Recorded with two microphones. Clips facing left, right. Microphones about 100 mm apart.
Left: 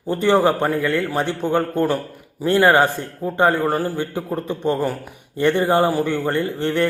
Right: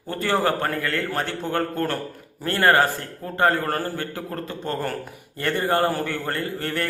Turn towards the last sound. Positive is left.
turn(degrees=20)  # may be behind; listen again after turning